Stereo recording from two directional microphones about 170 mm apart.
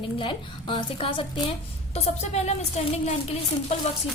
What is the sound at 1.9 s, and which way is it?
A woman's voice, 40° left (ahead or behind).